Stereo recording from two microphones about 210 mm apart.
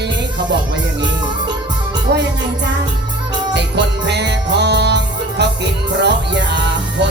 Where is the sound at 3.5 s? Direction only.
55° right (ahead or behind).